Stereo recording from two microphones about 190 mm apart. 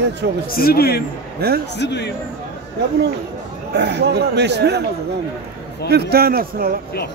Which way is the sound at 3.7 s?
65° right (ahead or behind).